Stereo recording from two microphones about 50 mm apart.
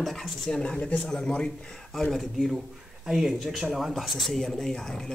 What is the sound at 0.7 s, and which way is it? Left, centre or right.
Speech, left.